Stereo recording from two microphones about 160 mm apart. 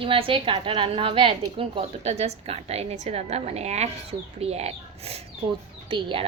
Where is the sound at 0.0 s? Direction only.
35° right (ahead or behind).